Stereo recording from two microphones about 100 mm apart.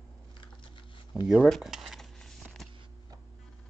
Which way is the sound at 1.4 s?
Centre (ahead or behind).